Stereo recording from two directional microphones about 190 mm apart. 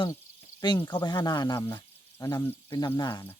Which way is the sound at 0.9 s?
20° left (ahead or behind).